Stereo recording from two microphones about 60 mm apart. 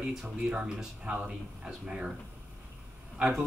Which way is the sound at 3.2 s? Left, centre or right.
Centre.